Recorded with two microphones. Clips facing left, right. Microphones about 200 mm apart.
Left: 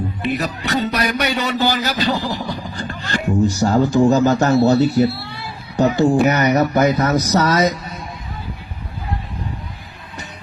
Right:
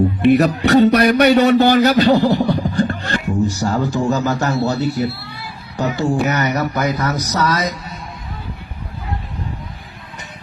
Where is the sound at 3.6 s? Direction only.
25° left (ahead or behind).